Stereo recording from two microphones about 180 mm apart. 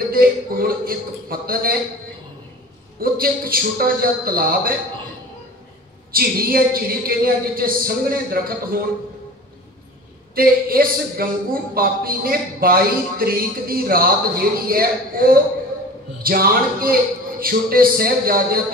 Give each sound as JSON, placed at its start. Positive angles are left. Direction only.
{"t": 0.1, "sound": "speech", "side_deg": -55}
{"t": 3.0, "sound": "a man's voice", "side_deg": -55}
{"t": 6.1, "sound": "a man's voice", "side_deg": -55}
{"t": 10.3, "sound": "a man's voice", "side_deg": -55}